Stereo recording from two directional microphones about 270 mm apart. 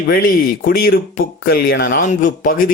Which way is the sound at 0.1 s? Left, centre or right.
Left.